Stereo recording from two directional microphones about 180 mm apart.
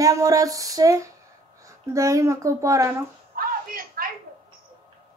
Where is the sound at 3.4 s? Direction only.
55° right (ahead or behind).